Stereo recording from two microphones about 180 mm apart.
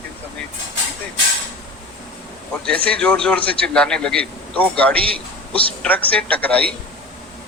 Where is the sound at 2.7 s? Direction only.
5° left (ahead or behind).